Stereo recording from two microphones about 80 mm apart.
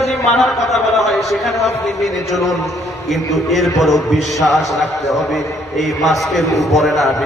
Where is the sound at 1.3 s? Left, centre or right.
Centre.